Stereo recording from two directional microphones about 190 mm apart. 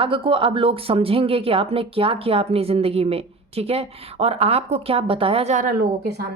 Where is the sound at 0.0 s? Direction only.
30° right (ahead or behind).